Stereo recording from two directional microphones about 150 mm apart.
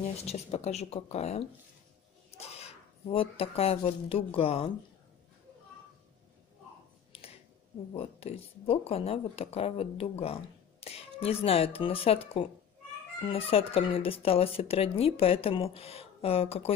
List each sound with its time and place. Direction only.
0.0 s speech: 45° left (ahead or behind)
7.1 s a sound: 40° left (ahead or behind)
7.9 s speech: 40° left (ahead or behind)